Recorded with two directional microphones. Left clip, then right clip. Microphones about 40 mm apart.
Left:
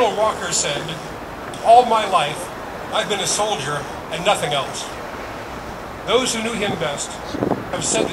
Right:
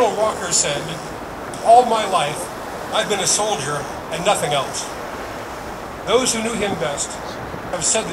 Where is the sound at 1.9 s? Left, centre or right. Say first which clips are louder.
Left 1 dB; right.